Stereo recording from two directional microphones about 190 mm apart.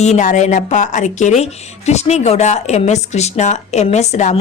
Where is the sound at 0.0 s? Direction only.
35° left (ahead or behind).